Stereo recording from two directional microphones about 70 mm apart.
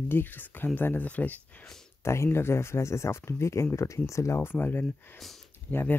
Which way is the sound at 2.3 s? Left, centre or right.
Left.